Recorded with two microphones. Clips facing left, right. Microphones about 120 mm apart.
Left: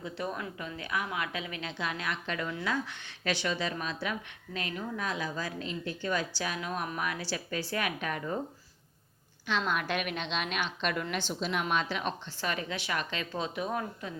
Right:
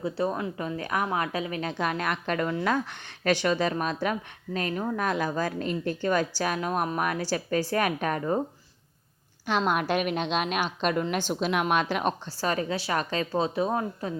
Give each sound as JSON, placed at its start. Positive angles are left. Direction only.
{"t": 0.0, "sound": "a woman's voice", "side_deg": -30}
{"t": 0.6, "sound": "a woman's voice", "side_deg": -40}
{"t": 9.5, "sound": "a woman's voice", "side_deg": -45}